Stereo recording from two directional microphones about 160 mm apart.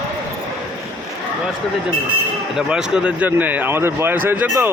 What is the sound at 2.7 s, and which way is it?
Speech, 5° right (ahead or behind).